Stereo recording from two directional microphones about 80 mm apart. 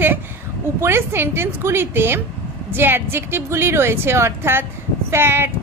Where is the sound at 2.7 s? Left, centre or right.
Right.